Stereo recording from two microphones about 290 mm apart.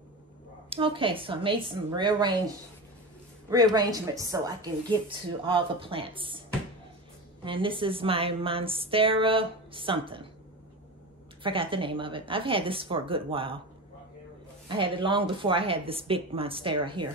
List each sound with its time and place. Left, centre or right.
0.7 s a woman's voice: centre
3.4 s a woman's voice: centre
7.4 s a woman's voice: centre
11.4 s a woman's voice: centre
14.7 s a woman's voice: centre